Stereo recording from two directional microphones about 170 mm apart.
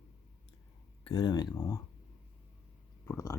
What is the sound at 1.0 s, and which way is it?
Speech, 30° left (ahead or behind).